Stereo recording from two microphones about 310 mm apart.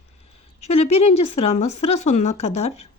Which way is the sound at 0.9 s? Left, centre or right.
Centre.